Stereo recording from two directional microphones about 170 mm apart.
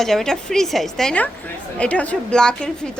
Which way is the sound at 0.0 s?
Centre (ahead or behind).